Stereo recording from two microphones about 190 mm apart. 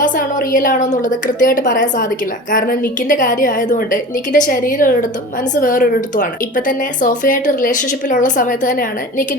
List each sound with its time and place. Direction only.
0.0 s speech: 45° left (ahead or behind)